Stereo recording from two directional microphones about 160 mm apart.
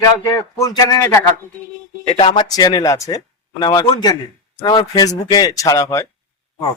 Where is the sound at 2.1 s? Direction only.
30° left (ahead or behind).